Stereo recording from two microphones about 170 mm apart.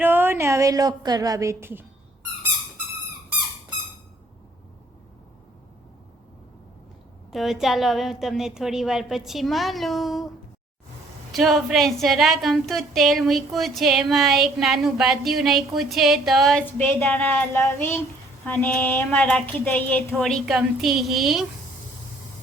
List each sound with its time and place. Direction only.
0.0 s a woman's voice: 10° right (ahead or behind)
7.3 s a woman's voice: centre (ahead or behind)
11.3 s a woman's voice: centre (ahead or behind)
16.6 s a sound: 10° left (ahead or behind)
20.4 s a woman's voice: centre (ahead or behind)